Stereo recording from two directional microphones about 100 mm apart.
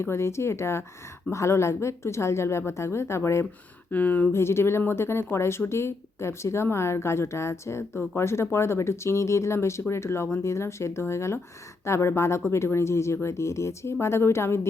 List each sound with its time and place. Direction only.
0.0 s speech: 25° left (ahead or behind)
3.9 s speech: 15° left (ahead or behind)